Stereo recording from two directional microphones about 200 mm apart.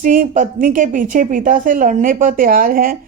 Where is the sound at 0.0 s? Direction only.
40° right (ahead or behind).